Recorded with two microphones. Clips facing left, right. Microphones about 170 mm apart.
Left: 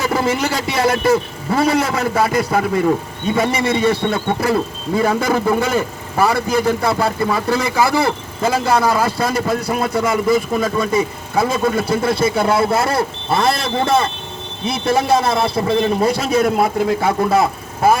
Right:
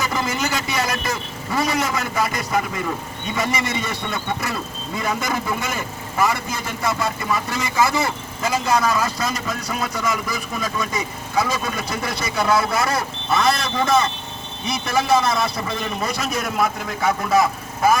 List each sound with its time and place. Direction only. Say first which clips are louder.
0.0 s a man's voice: left 6 dB; 30° left (ahead or behind)